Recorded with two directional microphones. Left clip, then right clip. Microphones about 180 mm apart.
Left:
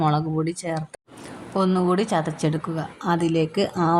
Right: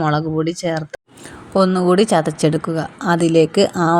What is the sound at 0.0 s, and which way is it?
Speech, 15° right (ahead or behind).